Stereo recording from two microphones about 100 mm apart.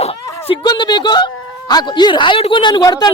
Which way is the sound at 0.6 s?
45° left (ahead or behind).